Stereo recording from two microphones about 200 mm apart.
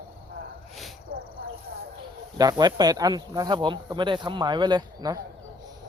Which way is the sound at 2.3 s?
20° right (ahead or behind).